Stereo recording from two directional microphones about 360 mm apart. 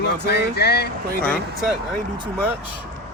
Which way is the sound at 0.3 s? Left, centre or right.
Left.